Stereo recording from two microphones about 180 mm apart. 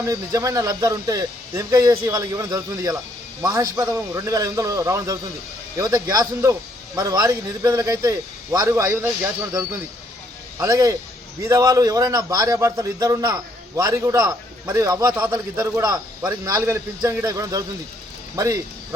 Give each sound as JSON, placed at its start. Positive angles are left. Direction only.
{"t": 0.0, "sound": "a man's voice", "side_deg": -15}